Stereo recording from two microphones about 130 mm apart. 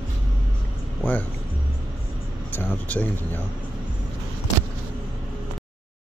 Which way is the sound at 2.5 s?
15° left (ahead or behind).